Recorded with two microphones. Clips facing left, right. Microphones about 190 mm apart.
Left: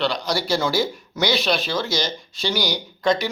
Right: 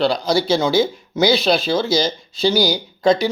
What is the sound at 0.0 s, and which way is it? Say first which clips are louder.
A man's voice: right 6 dB; 25° right (ahead or behind).